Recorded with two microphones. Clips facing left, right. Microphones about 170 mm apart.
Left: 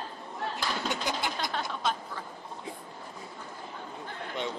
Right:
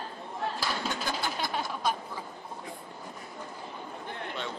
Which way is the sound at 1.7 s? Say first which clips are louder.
Right 1 dB; 10° right (ahead or behind).